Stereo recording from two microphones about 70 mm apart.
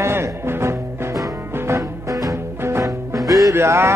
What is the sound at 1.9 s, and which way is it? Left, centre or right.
Music, right.